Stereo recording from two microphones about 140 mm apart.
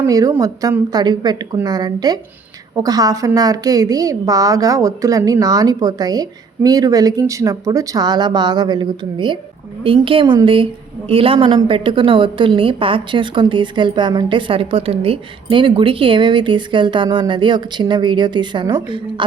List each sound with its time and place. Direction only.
0.1 s a woman's voice: 25° right (ahead or behind)